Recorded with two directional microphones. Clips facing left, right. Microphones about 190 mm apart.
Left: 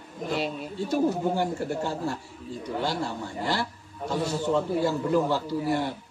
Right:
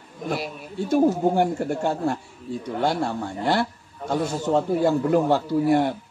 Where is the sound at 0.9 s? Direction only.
55° right (ahead or behind).